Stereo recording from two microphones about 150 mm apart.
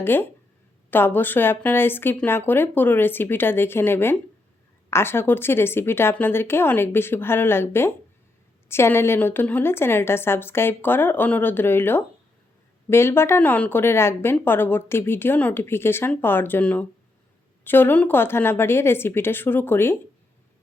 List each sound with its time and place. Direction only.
0.0 s a woman's voice: 15° left (ahead or behind)